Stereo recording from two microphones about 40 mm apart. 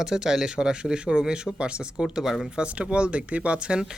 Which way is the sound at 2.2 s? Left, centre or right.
Centre.